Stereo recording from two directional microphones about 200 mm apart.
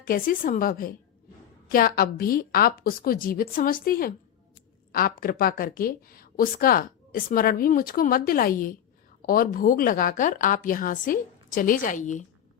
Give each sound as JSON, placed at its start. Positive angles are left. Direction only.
{"t": 0.0, "sound": "a woman's voice", "side_deg": 45}